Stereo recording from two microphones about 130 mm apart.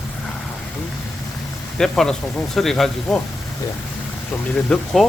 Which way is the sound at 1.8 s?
5° left (ahead or behind).